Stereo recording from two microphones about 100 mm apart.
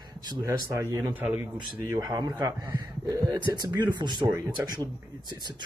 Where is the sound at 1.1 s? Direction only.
15° right (ahead or behind).